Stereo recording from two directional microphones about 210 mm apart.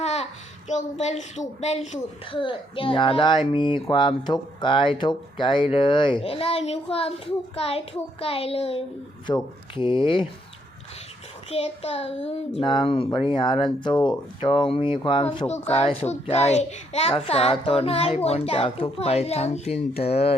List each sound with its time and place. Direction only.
0.0 s a sound: 30° left (ahead or behind)
0.7 s a woman's voice: 35° left (ahead or behind)
11.5 s speech: 30° left (ahead or behind)